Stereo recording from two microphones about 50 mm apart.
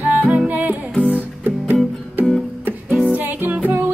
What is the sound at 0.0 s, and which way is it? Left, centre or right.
Music, right.